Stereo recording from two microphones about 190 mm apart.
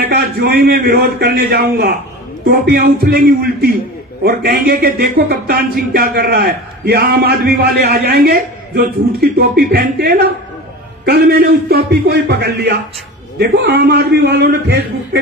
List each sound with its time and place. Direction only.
0.1 s a man's voice: 55° right (ahead or behind)